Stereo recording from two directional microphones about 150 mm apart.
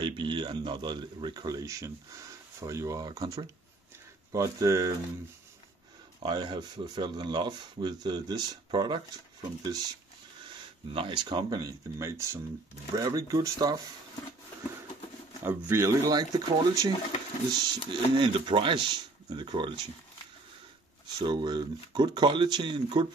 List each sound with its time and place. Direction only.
0.0 s speech: 30° right (ahead or behind)
6.1 s speech: 30° right (ahead or behind)
10.9 s speech: 35° right (ahead or behind)
15.4 s speech: 20° right (ahead or behind)
21.2 s speech: 30° right (ahead or behind)